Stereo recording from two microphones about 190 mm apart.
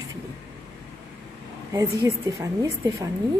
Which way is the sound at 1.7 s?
15° right (ahead or behind).